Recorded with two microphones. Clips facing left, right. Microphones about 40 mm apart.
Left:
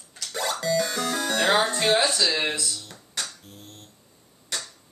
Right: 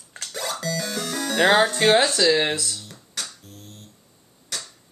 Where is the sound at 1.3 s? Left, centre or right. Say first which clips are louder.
Right 5 dB; centre.